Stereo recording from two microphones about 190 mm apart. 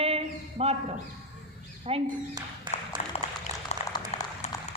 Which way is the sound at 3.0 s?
35° left (ahead or behind).